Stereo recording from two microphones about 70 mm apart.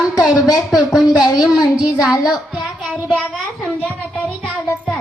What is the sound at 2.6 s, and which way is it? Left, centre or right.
Child singing, centre.